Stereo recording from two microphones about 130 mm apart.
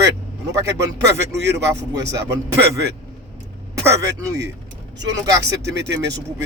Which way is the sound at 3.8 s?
25° right (ahead or behind).